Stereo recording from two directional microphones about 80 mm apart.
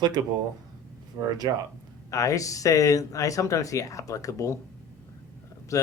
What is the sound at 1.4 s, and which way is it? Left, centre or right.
Speech, right.